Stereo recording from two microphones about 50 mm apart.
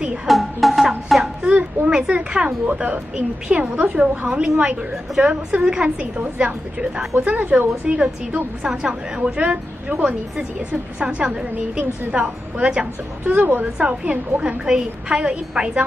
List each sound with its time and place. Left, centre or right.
0.3 s music: centre
1.4 s a sound: right
2.7 s a woman's voice: right
5.1 s a woman's voice: centre
6.1 s a woman's voice: right
11.0 s a woman's voice: right
13.2 s a woman's voice: right
13.7 s a woman's voice: right